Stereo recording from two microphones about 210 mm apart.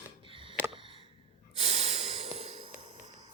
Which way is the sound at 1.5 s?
30° right (ahead or behind).